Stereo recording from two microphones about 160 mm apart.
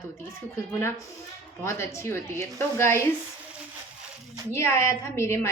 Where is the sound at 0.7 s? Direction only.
15° left (ahead or behind).